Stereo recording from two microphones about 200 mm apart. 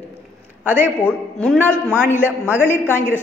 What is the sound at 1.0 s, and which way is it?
Speech, 5° left (ahead or behind).